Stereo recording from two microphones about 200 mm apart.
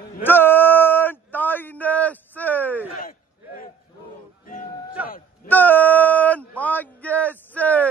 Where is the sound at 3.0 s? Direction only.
45° left (ahead or behind).